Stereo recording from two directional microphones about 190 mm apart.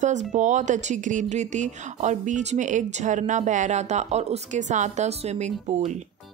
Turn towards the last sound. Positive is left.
turn(degrees=-35)  # may be behind; listen again after turning